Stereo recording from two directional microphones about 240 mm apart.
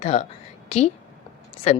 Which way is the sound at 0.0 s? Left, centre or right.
Left.